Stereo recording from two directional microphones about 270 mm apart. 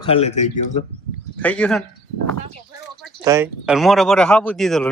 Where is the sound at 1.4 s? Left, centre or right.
Centre.